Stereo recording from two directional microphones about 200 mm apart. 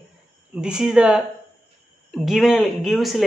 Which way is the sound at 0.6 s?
5° right (ahead or behind).